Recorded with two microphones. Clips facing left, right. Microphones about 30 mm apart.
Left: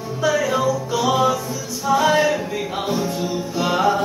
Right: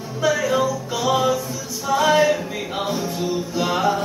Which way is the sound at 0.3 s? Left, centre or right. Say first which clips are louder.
Left 1 dB; centre.